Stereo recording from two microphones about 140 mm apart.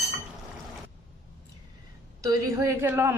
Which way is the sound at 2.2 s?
20° right (ahead or behind).